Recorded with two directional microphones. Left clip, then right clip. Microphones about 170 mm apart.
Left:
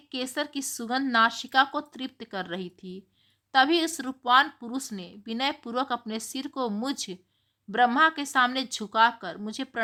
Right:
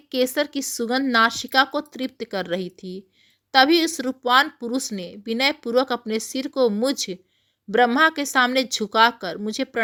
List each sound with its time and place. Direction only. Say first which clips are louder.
0.1 s a woman's voice: right 9 dB; 25° right (ahead or behind)